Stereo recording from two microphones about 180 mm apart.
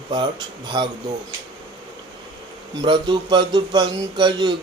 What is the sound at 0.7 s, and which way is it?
Speech, 25° right (ahead or behind).